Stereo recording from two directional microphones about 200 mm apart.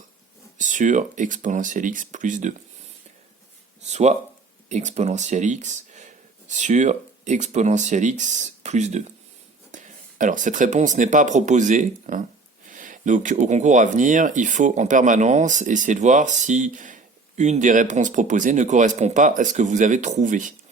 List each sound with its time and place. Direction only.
0.6 s speech: 40° right (ahead or behind)
3.8 s speech: 35° right (ahead or behind)